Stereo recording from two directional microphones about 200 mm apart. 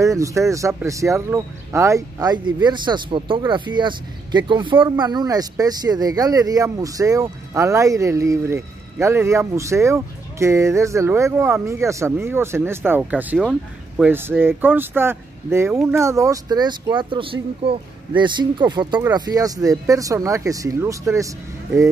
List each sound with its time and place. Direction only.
0.0 s speech: 15° right (ahead or behind)